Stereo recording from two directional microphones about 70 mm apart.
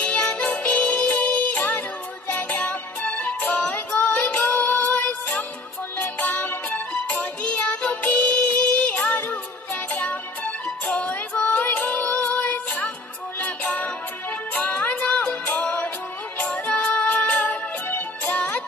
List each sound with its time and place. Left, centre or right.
0.0 s music: left